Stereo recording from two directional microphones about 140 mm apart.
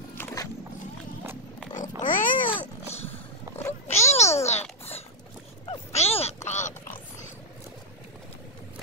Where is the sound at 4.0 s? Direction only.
50° left (ahead or behind).